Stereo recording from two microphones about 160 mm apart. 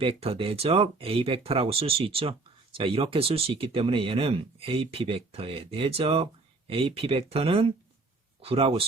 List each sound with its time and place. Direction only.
0.0 s speech: 35° right (ahead or behind)